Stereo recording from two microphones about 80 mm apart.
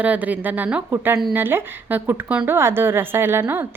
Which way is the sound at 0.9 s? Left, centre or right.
Right.